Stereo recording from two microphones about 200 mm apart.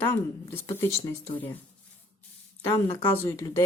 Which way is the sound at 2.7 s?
15° left (ahead or behind).